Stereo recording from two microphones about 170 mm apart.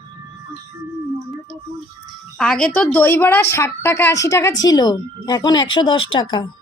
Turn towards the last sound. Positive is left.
turn(degrees=30)  # may be behind; listen again after turning